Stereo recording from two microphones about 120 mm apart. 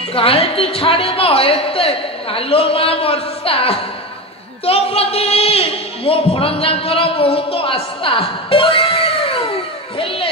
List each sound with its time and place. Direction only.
0.1 s a woman's voice: 50° left (ahead or behind)